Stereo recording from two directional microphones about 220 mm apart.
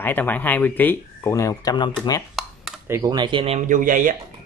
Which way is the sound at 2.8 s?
15° right (ahead or behind).